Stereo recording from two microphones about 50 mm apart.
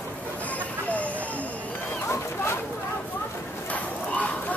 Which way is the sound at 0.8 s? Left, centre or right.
Left.